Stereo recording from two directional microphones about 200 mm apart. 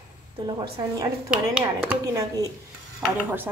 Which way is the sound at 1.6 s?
15° right (ahead or behind).